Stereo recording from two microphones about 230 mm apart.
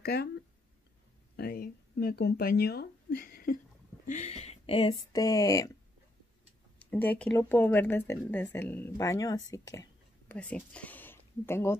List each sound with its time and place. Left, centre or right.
0.0 s speech: left
1.3 s speech: left
4.1 s speech: left; by 5.7 s centre
6.8 s speech: centre